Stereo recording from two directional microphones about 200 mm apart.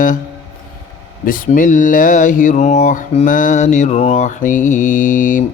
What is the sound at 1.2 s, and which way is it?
Speech, 45° left (ahead or behind).